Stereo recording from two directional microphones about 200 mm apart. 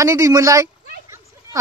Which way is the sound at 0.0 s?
15° right (ahead or behind).